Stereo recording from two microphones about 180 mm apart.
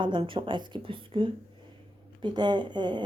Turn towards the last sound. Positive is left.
turn(degrees=-25)  # may be behind; listen again after turning